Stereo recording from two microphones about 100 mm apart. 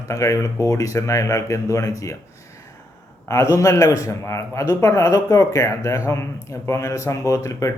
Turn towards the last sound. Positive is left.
turn(degrees=35)  # may be behind; listen again after turning